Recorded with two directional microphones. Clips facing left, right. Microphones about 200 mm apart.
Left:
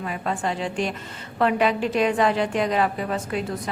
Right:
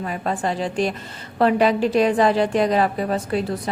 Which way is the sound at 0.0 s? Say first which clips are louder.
Right 3 dB; 40° right (ahead or behind).